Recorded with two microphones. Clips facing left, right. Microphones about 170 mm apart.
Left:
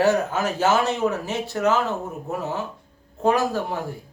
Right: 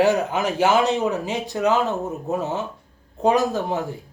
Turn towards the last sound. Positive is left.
turn(degrees=-20)  # may be behind; listen again after turning